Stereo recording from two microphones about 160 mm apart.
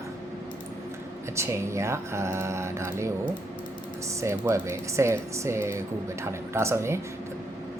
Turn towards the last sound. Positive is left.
turn(degrees=-15)  # may be behind; listen again after turning